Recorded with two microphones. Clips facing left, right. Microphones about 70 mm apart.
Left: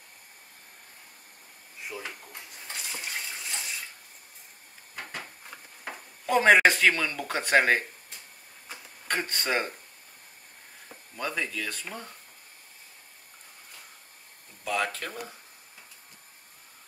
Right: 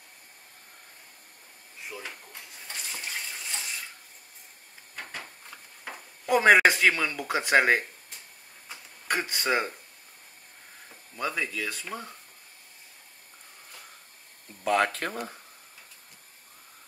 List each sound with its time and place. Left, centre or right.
1.9 s dishes: centre
4.9 s a sound: centre
6.2 s speech: centre
9.0 s speech: centre
11.1 s speech: centre
14.6 s speech: right